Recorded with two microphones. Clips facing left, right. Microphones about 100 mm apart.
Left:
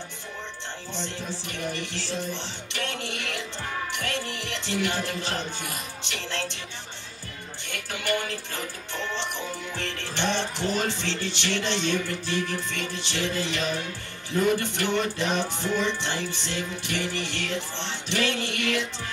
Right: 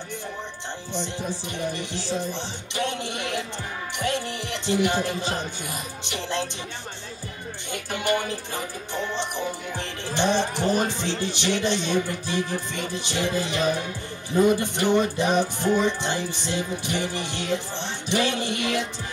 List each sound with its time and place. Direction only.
0.9 s music: 15° right (ahead or behind)
8.0 s music: 20° right (ahead or behind)